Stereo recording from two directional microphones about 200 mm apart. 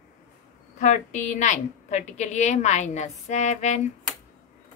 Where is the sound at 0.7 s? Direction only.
35° left (ahead or behind).